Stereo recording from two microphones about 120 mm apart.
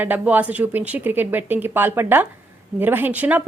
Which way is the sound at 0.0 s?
15° right (ahead or behind).